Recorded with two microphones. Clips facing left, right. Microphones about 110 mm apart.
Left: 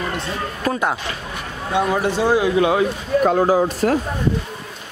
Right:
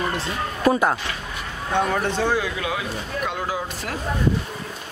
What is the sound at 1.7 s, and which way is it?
Speech, 10° left (ahead or behind).